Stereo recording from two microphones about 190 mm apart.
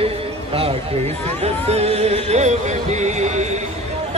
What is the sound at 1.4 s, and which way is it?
Music, 35° right (ahead or behind).